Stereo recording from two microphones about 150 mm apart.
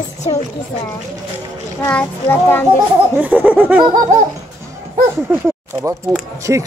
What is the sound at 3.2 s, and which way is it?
Speech, 10° right (ahead or behind).